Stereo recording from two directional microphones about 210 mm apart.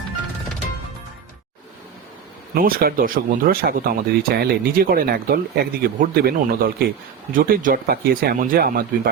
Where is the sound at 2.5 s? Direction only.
45° right (ahead or behind).